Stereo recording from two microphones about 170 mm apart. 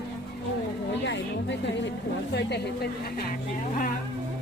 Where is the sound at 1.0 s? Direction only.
90° left.